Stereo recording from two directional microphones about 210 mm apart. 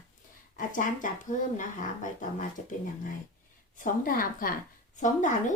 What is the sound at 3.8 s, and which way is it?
Speech, 40° left (ahead or behind).